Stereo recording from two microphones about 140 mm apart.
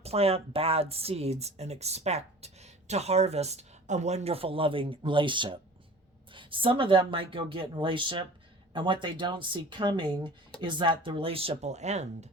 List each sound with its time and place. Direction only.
0.0 s speech: 45° right (ahead or behind)